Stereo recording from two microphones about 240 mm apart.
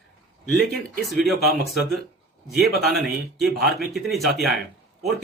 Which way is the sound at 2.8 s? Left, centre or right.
Centre.